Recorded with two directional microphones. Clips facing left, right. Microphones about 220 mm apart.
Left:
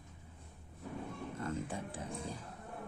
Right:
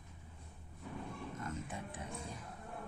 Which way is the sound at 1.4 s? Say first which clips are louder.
Left 7 dB; 30° left (ahead or behind).